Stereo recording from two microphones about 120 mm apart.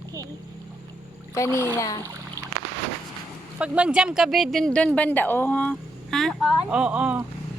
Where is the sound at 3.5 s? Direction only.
10° right (ahead or behind).